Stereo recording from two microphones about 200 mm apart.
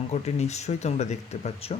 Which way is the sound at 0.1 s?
35° left (ahead or behind).